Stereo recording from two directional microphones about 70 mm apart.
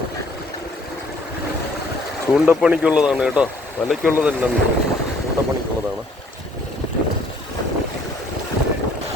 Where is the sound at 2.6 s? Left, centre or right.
Centre.